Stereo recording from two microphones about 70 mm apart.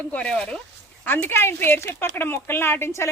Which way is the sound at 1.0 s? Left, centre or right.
Left.